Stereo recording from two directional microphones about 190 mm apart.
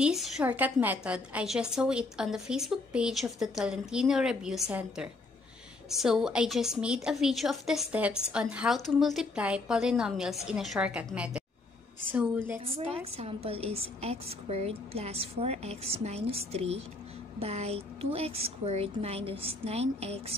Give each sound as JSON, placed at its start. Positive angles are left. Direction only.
{"t": 0.0, "sound": "a woman's voice", "side_deg": -5}
{"t": 12.7, "sound": "a woman's voice", "side_deg": -30}